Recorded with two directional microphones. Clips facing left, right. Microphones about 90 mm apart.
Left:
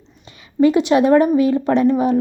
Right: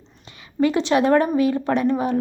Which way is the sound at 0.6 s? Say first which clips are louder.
Left 5 dB; 20° left (ahead or behind).